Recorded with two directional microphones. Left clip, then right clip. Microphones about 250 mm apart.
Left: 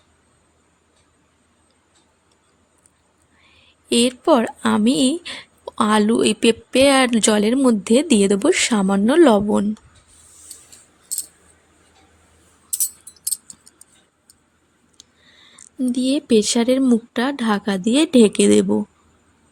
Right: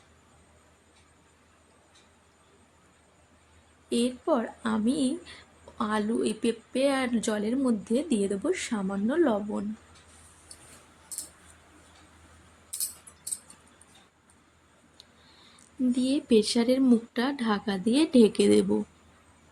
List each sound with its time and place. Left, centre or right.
3.8 s speech: left
15.0 s a sound: left
15.5 s speech: left